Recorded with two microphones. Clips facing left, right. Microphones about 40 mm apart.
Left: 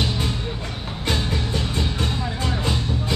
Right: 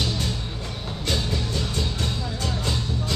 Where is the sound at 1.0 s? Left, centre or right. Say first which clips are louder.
Left 2 dB; left.